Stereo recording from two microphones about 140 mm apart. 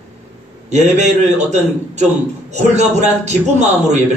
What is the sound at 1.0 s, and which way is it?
A man's voice, 55° right (ahead or behind).